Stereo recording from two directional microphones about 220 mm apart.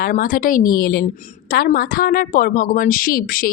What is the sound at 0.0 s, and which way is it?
A woman's voice, 40° left (ahead or behind).